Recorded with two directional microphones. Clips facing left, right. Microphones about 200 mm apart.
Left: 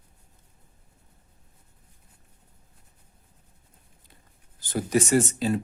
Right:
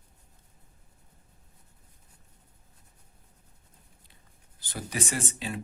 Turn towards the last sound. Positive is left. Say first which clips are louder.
# left 11 dB
turn(degrees=40)  # may be behind; listen again after turning